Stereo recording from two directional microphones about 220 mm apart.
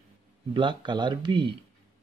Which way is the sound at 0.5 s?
20° right (ahead or behind).